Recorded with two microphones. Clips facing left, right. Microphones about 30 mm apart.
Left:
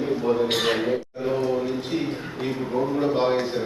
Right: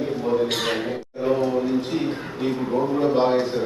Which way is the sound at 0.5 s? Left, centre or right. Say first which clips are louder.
Left 2 dB; centre.